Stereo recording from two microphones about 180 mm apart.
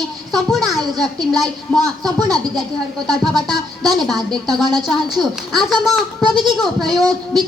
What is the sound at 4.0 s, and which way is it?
Speech, centre (ahead or behind).